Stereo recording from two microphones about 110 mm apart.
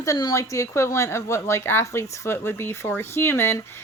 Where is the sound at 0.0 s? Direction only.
35° left (ahead or behind).